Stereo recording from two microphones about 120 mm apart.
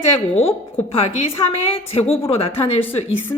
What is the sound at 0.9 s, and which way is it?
A woman's voice, 55° left (ahead or behind).